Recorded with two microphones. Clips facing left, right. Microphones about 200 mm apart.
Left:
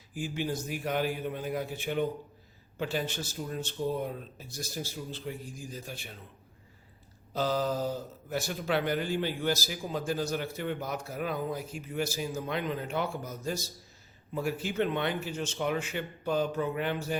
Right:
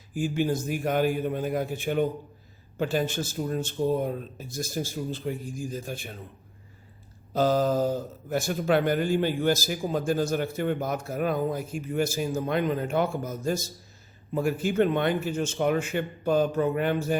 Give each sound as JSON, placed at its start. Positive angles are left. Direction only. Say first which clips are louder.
{"t": 0.1, "sound": "speech", "louder": "right 7 dB", "side_deg": -50}
{"t": 7.3, "sound": "speech", "louder": "right 6 dB", "side_deg": -50}